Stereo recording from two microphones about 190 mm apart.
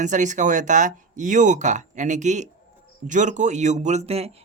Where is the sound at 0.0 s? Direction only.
40° right (ahead or behind).